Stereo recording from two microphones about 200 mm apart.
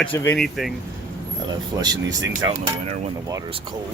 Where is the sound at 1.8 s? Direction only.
20° right (ahead or behind).